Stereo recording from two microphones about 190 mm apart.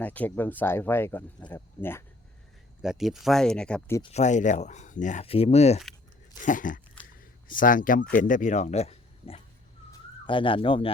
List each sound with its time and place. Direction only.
0.0 s speech: 10° left (ahead or behind)
2.8 s speech: centre (ahead or behind)
4.0 s speech: 35° left (ahead or behind)
7.2 s a sound: 45° left (ahead or behind)
8.1 s speech: 45° left (ahead or behind); by 10.9 s 25° left (ahead or behind)